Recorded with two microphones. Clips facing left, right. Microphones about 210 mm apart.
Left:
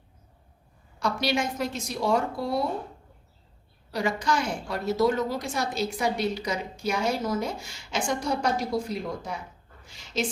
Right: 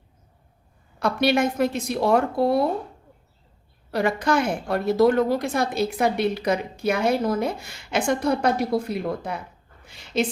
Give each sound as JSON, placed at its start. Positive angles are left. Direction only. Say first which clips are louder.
{"t": 0.9, "sound": "a woman's voice", "louder": "right 6 dB", "side_deg": -55}
{"t": 3.9, "sound": "a woman's voice", "louder": "right 5 dB", "side_deg": -60}
{"t": 9.8, "sound": "a sound", "louder": "right 6 dB", "side_deg": -60}